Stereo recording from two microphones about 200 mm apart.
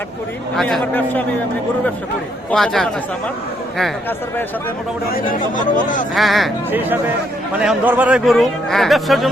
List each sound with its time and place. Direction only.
0.5 s speech: centre (ahead or behind)
2.5 s speech: centre (ahead or behind)
5.1 s speech: 40° left (ahead or behind)
6.1 s speech: centre (ahead or behind)
6.7 s speech: 10° right (ahead or behind)